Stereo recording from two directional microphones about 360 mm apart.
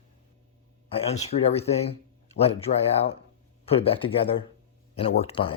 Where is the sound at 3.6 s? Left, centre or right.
Centre.